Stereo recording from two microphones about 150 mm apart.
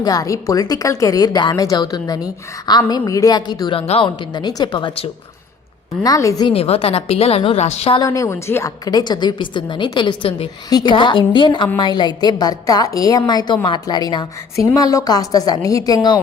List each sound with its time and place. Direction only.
0.0 s a woman's voice: 25° left (ahead or behind)
3.8 s a woman's voice: 40° left (ahead or behind); by 6.5 s 25° left (ahead or behind)
6.5 s a woman's voice: 40° left (ahead or behind)
8.0 s a woman's voice: 20° left (ahead or behind)